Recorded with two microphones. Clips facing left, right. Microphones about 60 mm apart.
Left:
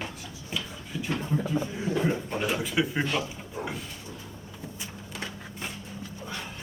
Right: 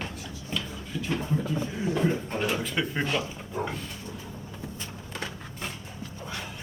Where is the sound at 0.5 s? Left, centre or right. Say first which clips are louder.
Right 1 dB; centre.